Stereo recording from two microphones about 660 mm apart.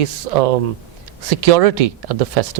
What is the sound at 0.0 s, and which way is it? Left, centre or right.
Speech, right.